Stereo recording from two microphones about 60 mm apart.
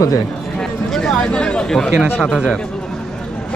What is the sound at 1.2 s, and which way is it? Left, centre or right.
Speech, centre.